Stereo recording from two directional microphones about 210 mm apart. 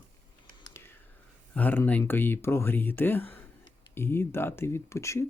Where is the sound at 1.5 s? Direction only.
10° left (ahead or behind).